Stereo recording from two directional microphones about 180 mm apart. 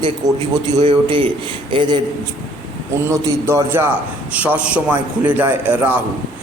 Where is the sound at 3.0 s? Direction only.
15° right (ahead or behind).